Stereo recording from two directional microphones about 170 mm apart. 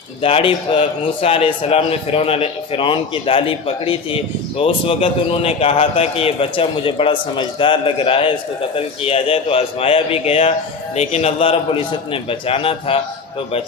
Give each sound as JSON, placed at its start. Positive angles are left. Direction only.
{"t": 0.2, "sound": "a man's voice", "side_deg": 35}